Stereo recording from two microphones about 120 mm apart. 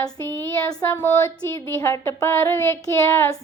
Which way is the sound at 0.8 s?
20° left (ahead or behind).